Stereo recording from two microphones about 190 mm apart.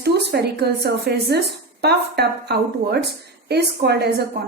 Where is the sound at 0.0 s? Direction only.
60° right (ahead or behind).